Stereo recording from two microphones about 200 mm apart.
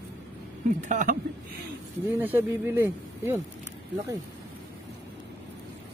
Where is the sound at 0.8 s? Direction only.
40° right (ahead or behind).